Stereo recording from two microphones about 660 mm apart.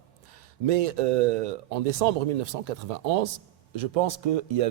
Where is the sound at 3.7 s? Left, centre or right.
Right.